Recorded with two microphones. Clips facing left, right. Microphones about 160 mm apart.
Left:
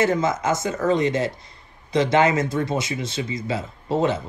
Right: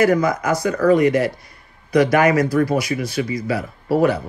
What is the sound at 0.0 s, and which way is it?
Speech, 25° left (ahead or behind).